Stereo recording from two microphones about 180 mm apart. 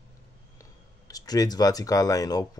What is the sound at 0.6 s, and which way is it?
Speech, 20° left (ahead or behind).